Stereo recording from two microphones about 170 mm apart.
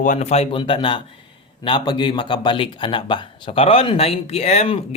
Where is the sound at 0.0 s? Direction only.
45° left (ahead or behind).